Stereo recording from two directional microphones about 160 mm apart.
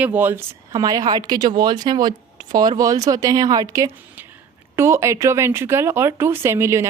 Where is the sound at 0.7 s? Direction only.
25° right (ahead or behind).